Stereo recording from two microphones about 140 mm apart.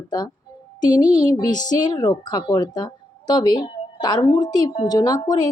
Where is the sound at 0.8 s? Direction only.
30° left (ahead or behind).